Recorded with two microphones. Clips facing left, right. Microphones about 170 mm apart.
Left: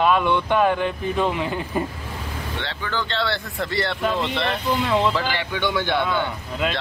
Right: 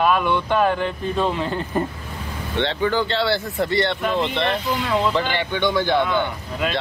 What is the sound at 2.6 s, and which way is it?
Speech, 20° right (ahead or behind).